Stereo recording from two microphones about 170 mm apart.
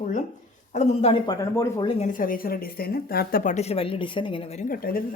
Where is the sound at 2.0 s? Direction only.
55° left (ahead or behind); by 4.7 s 35° left (ahead or behind).